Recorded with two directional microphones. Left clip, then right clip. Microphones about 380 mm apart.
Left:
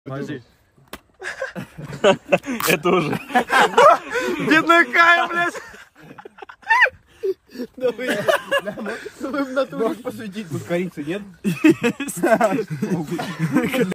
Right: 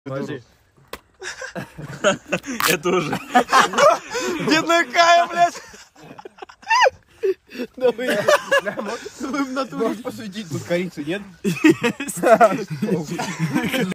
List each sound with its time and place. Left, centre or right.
0.1 s speech: centre
0.9 s a sound: centre
1.9 s speech: left
3.2 s speech: right
4.1 s speech: centre
4.9 s a sound: centre
7.2 s a sound: centre
7.8 s speech: right
8.1 s speech: centre
9.2 s speech: centre
9.8 s speech: centre
13.2 s speech: centre
13.5 s speech: centre